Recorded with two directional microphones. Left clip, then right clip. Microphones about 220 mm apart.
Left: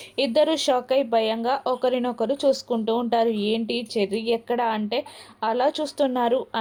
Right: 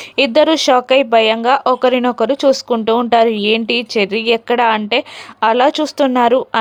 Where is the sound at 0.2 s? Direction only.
20° right (ahead or behind).